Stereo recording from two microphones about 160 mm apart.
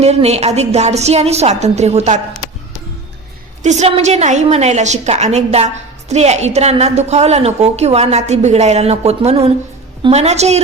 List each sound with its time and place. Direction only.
0.0 s a woman's voice: 40° right (ahead or behind)
3.6 s a woman's voice: 45° right (ahead or behind)